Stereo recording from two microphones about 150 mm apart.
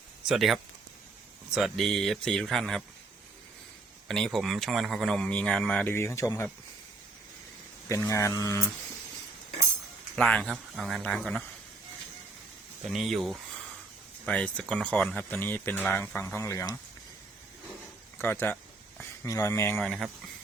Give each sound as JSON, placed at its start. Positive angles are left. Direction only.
{"t": 0.3, "sound": "speech", "side_deg": 0}
{"t": 4.1, "sound": "speech", "side_deg": 0}
{"t": 7.9, "sound": "speech", "side_deg": 20}
{"t": 10.2, "sound": "speech", "side_deg": 5}
{"t": 12.8, "sound": "speech", "side_deg": 0}
{"t": 18.2, "sound": "speech", "side_deg": 15}
{"t": 19.7, "sound": "speech", "side_deg": 5}